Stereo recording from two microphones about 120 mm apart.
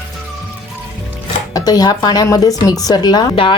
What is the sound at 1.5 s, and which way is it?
Speech, 35° left (ahead or behind).